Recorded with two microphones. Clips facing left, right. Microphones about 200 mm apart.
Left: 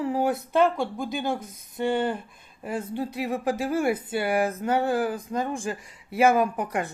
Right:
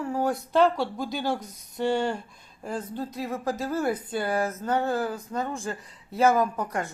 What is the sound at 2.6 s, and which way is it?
Speech, 10° left (ahead or behind).